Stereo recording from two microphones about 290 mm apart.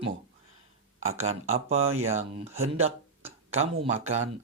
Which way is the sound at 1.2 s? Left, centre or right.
Right.